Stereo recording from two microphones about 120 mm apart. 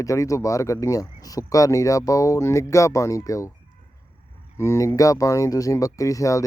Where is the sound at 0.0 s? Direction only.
25° left (ahead or behind).